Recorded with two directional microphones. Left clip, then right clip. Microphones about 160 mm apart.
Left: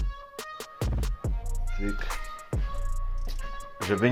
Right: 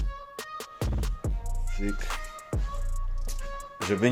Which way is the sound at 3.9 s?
20° right (ahead or behind).